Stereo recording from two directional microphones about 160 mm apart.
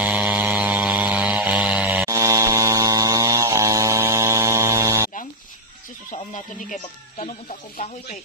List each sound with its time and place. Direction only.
0.0 s a sound: 10° right (ahead or behind)
2.0 s chainsaw: 20° right (ahead or behind)
6.3 s speech: 55° left (ahead or behind)